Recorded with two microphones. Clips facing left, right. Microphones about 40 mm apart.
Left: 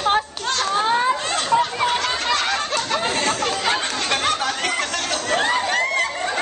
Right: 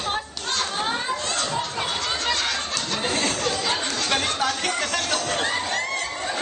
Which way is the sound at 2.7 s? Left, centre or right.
Left.